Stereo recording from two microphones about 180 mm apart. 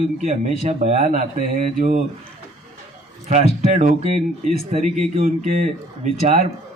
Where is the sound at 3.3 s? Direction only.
40° right (ahead or behind).